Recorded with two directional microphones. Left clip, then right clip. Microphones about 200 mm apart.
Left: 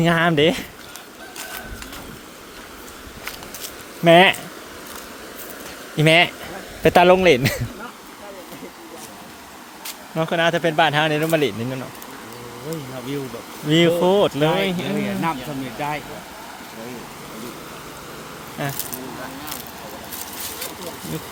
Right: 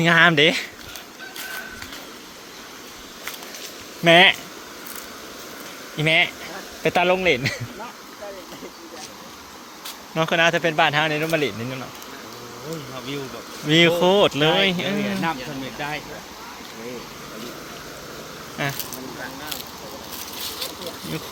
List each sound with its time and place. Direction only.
0.0 s speech: 15° left (ahead or behind)
4.0 s speech: 20° left (ahead or behind)
6.0 s speech: 35° left (ahead or behind)
10.2 s speech: 5° left (ahead or behind); by 11.8 s 25° left (ahead or behind)
13.7 s speech: 10° left (ahead or behind)
15.0 s speech: 65° left (ahead or behind)
18.6 s speech: 10° left (ahead or behind)